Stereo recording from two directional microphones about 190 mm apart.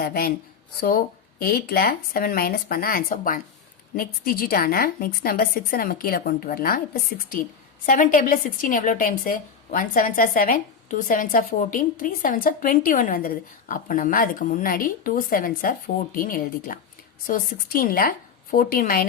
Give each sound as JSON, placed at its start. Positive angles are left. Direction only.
{"t": 0.0, "sound": "a woman's voice", "side_deg": 50}
{"t": 1.4, "sound": "a woman's voice", "side_deg": 55}
{"t": 7.9, "sound": "a woman's voice", "side_deg": 40}